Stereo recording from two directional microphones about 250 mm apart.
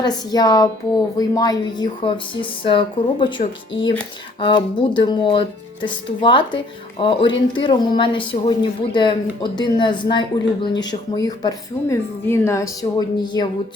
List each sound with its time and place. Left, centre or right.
0.0 s speech: centre